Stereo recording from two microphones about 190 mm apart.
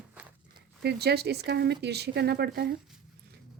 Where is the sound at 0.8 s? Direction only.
60° right (ahead or behind).